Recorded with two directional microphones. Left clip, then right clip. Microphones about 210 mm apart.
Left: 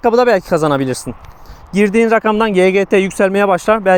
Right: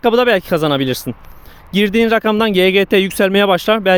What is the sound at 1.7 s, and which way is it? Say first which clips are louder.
Speech: left 2 dB; 15° right (ahead or behind).